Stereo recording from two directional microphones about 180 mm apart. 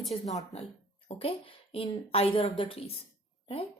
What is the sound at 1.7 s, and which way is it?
A woman's voice, 30° left (ahead or behind).